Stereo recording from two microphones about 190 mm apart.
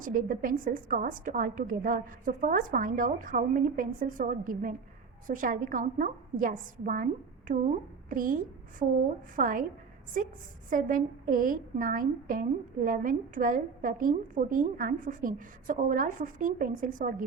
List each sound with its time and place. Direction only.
0.0 s a woman's voice: 45° right (ahead or behind)